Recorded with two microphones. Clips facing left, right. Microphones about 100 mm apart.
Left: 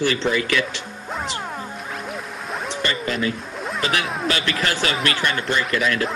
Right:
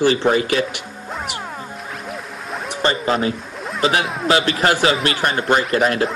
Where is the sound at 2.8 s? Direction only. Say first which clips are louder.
Right 7 dB; 35° right (ahead or behind).